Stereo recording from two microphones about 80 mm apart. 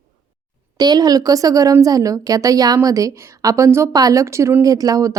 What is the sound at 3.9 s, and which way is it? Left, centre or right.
A woman's voice, right.